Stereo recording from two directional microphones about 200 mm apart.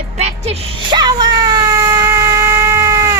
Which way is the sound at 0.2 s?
30° right (ahead or behind).